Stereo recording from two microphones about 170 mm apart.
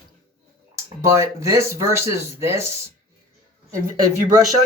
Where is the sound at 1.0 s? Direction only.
15° right (ahead or behind).